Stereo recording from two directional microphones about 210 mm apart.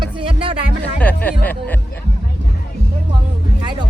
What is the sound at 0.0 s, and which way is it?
Music, 25° right (ahead or behind).